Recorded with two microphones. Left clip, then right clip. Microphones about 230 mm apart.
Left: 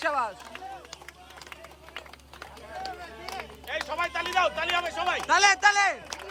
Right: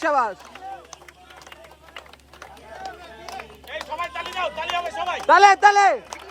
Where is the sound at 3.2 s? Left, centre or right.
Centre.